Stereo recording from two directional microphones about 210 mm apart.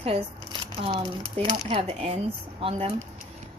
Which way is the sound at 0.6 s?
25° right (ahead or behind).